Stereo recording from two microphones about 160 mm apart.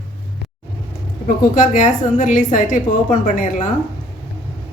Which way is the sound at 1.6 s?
55° left (ahead or behind).